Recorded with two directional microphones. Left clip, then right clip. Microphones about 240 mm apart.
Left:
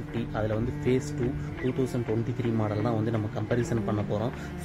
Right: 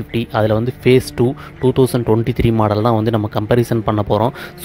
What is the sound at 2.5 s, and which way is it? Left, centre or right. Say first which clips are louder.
Speech: right 14 dB; right.